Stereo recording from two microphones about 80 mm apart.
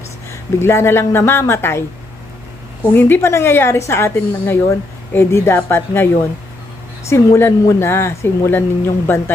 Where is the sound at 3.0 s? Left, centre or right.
Left.